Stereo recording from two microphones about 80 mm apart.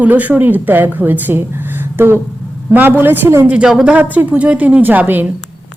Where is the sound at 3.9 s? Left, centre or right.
Right.